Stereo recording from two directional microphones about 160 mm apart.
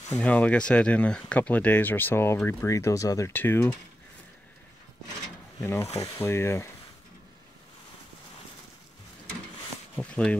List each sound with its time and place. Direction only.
0.1 s speech: 10° left (ahead or behind)
5.6 s speech: 15° left (ahead or behind)
9.9 s speech: 5° left (ahead or behind)